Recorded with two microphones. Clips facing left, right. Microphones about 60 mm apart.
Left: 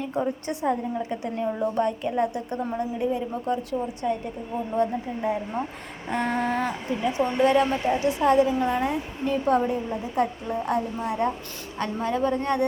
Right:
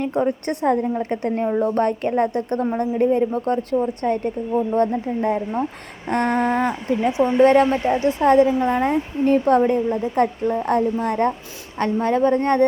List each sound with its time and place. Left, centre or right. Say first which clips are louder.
0.0 s a woman's voice: right 6 dB; right